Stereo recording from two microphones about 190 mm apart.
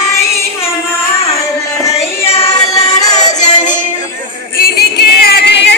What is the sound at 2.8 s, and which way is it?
Music, 20° left (ahead or behind).